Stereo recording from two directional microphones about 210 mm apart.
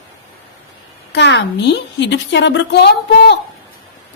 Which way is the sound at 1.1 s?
55° left (ahead or behind).